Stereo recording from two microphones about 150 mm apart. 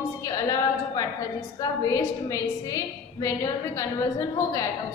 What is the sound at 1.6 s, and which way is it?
A woman's voice, 20° left (ahead or behind).